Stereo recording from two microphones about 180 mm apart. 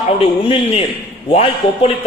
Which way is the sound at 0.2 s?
30° left (ahead or behind).